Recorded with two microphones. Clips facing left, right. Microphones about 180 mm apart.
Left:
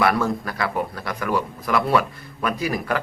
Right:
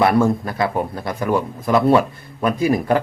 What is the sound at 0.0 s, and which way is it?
Speech, 25° right (ahead or behind).